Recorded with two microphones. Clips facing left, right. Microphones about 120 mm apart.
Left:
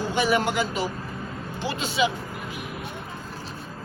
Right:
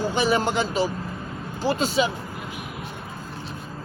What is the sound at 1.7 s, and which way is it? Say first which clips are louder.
Speech: right 3 dB; 40° right (ahead or behind).